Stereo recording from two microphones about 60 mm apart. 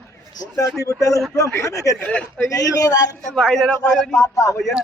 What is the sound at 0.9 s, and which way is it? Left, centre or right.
A woman's voice, left.